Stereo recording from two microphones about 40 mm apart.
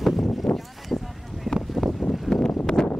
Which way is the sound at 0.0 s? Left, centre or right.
Centre.